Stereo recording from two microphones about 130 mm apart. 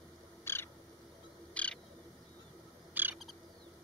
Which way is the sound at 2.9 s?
15° right (ahead or behind).